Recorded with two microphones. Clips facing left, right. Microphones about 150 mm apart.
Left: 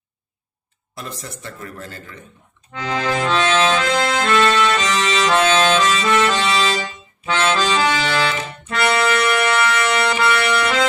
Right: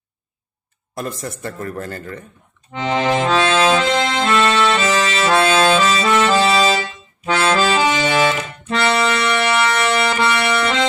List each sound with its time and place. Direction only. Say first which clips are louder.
0.9 s a man's voice: right 6 dB; 50° right (ahead or behind)
2.7 s accordion: right 4 dB; 25° right (ahead or behind)
3.2 s accordion: even; 35° right (ahead or behind)
3.8 s accordion: right 1 dB; 20° right (ahead or behind)
7.8 s accordion: right 3 dB; 20° right (ahead or behind)
8.7 s music: right 1 dB; 25° right (ahead or behind)